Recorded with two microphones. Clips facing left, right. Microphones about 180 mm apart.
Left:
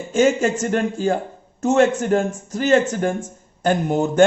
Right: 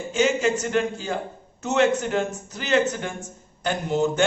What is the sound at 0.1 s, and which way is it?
Speech, 50° left (ahead or behind).